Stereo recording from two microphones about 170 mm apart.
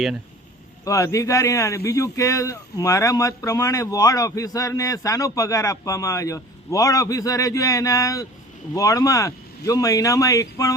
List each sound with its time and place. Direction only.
0.9 s a man's voice: 20° left (ahead or behind)